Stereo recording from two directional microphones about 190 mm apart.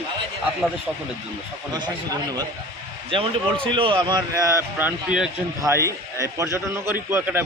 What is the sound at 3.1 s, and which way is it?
A man's voice, 25° right (ahead or behind).